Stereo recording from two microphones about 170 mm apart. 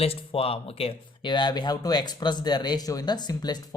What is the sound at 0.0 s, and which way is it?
A woman's voice, 35° left (ahead or behind).